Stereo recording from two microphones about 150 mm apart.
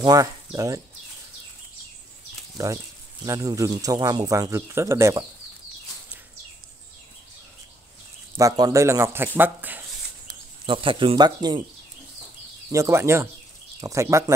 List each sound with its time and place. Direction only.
0.0 s speech: 25° right (ahead or behind)
2.5 s speech: 20° right (ahead or behind)
8.4 s speech: 25° right (ahead or behind)
10.7 s speech: 35° right (ahead or behind)
12.7 s speech: 20° right (ahead or behind)